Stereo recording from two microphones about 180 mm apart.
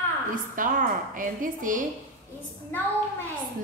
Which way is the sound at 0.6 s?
45° right (ahead or behind).